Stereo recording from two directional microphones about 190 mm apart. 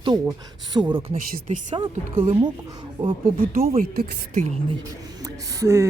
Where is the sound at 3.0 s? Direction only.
35° right (ahead or behind).